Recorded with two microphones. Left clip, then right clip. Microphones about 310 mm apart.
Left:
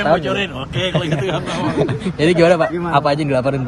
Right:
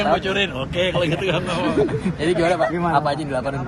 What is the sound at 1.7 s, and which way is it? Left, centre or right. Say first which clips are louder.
Speech: left 1 dB; left.